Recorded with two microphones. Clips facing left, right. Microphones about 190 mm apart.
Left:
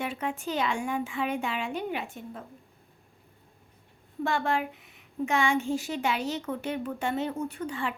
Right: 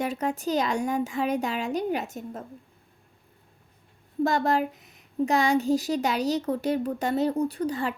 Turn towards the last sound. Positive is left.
turn(degrees=-40)  # may be behind; listen again after turning